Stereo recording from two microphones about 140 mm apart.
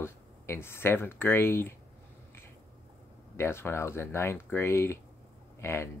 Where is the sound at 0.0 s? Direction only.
15° left (ahead or behind).